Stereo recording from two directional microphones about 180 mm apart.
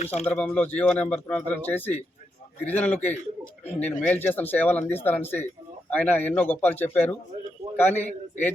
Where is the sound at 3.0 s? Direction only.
40° left (ahead or behind).